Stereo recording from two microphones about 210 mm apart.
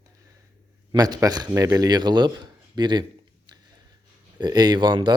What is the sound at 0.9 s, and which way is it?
Speech, 20° right (ahead or behind).